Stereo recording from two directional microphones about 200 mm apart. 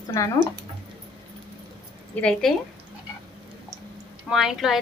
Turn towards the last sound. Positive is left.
turn(degrees=0)  # may be behind; listen again after turning